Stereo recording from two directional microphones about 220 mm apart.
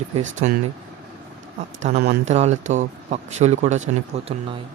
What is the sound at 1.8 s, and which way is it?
Speech, 30° right (ahead or behind).